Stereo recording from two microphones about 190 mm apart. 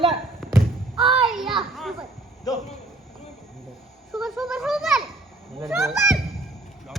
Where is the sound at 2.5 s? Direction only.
20° left (ahead or behind).